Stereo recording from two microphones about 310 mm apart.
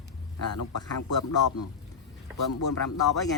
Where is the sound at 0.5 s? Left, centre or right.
Left.